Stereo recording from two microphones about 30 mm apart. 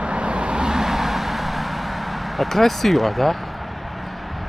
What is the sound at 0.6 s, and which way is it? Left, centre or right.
Vehicle, centre.